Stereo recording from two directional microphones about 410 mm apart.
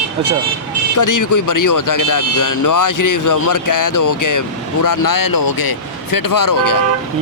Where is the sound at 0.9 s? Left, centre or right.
Left.